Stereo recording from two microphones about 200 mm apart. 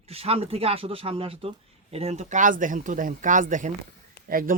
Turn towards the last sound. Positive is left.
turn(degrees=-45)  # may be behind; listen again after turning